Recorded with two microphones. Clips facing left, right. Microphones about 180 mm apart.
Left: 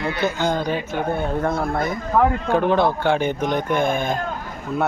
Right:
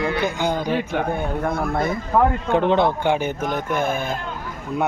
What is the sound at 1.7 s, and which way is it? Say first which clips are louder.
Speech: even; 25° right (ahead or behind).